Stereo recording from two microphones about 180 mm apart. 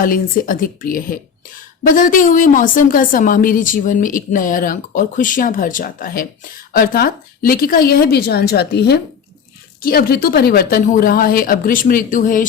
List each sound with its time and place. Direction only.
0.0 s a woman's voice: 50° left (ahead or behind)